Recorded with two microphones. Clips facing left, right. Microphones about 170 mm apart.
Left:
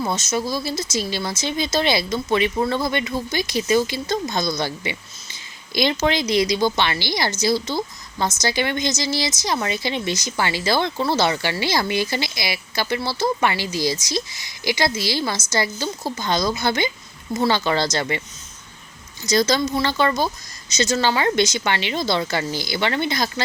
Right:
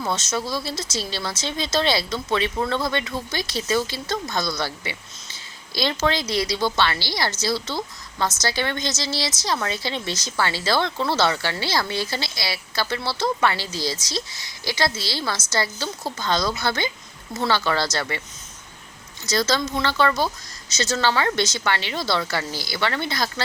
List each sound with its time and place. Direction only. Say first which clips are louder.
0.0 s speech: left 3 dB; 10° left (ahead or behind)
19.2 s speech: left 4 dB; 15° left (ahead or behind)